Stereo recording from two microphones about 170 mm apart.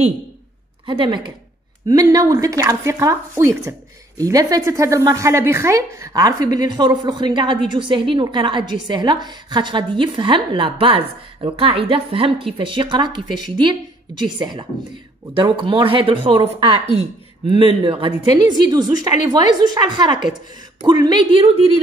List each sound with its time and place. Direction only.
0.8 s a woman's voice: 25° right (ahead or behind)